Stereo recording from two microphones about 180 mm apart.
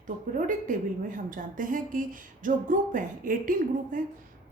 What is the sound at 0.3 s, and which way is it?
Speech, 45° right (ahead or behind).